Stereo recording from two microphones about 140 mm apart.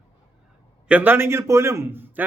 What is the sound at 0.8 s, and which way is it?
A man's voice, 10° right (ahead or behind).